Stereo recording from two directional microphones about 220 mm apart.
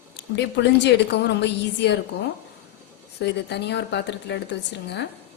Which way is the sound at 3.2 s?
50° left (ahead or behind).